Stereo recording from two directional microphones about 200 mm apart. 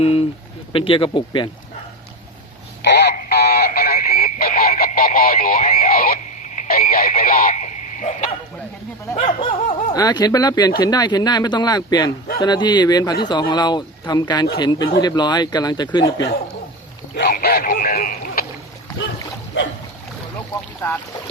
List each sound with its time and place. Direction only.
0.0 s speech: 30° left (ahead or behind)
2.8 s a sound: 55° left (ahead or behind)
3.9 s radio: 45° left (ahead or behind)
5.5 s radio: 30° left (ahead or behind)
5.8 s radio: 45° left (ahead or behind)
7.4 s frog: 40° left (ahead or behind)
9.2 s speech: 25° left (ahead or behind)
17.2 s a sound: 50° left (ahead or behind)